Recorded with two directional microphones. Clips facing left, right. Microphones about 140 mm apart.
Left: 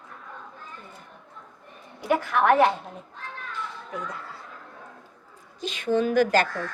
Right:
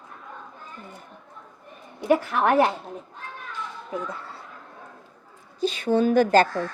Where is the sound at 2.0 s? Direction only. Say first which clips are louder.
Right 2 dB; 30° right (ahead or behind).